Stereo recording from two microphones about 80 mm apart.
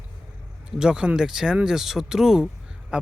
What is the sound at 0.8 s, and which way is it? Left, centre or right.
Speech, centre.